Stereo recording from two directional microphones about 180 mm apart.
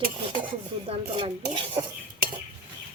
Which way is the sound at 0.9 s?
30° right (ahead or behind).